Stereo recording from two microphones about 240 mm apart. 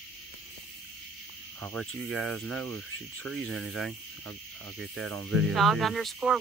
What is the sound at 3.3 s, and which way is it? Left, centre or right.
Speech, right.